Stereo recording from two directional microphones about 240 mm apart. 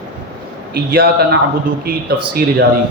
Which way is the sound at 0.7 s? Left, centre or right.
Right.